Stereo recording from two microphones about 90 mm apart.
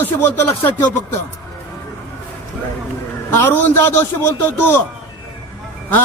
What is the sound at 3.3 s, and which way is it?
Speech, 25° left (ahead or behind).